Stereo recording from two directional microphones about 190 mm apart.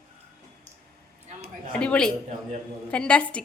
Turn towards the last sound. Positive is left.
turn(degrees=5)  # may be behind; listen again after turning